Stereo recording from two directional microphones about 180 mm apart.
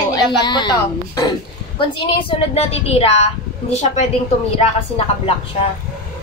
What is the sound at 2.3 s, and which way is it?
A woman's voice, 35° left (ahead or behind).